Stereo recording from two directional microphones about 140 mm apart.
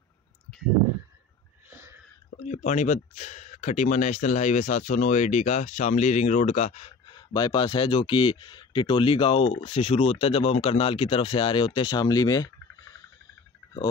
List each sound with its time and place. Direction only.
1.7 s a sound: 15° right (ahead or behind)
2.4 s speech: 60° left (ahead or behind)
7.1 s speech: 30° left (ahead or behind)